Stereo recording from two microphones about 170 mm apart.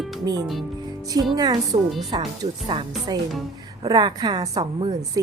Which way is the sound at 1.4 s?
25° right (ahead or behind).